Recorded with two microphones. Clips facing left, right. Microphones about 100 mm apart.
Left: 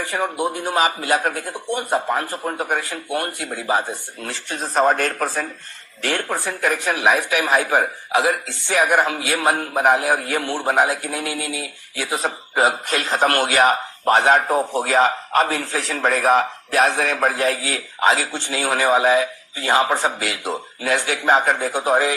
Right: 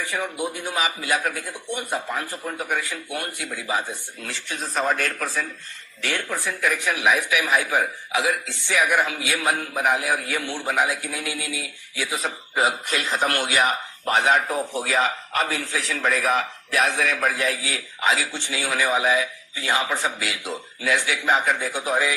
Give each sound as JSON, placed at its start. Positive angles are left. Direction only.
{"t": 0.0, "sound": "speech", "side_deg": 40}